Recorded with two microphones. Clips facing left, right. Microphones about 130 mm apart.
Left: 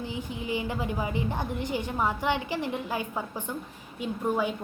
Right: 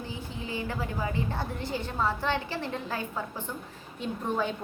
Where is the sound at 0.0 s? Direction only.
15° left (ahead or behind).